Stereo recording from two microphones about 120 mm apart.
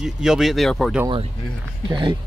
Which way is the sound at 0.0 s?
5° right (ahead or behind).